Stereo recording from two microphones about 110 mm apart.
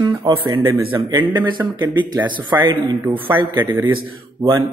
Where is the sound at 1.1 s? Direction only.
40° right (ahead or behind).